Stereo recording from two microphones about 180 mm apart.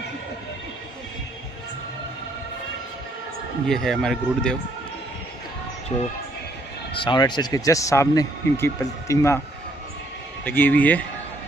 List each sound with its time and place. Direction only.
3.6 s speech: centre (ahead or behind)
5.9 s speech: 30° left (ahead or behind); by 9.4 s 15° left (ahead or behind)
10.4 s speech: 10° left (ahead or behind)